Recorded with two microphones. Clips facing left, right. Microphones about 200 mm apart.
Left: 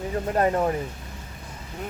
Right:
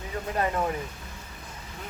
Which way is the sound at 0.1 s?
40° left (ahead or behind).